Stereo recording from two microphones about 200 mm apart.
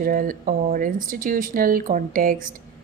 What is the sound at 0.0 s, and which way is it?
Speech, 45° right (ahead or behind).